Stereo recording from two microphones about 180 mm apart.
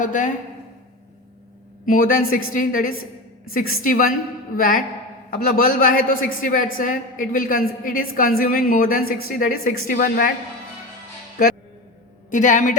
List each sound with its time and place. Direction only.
0.0 s a woman's voice: 45° left (ahead or behind)
1.8 s a woman's voice: 50° left (ahead or behind)
11.4 s a man's voice: 55° left (ahead or behind)
12.3 s a woman's voice: 45° left (ahead or behind)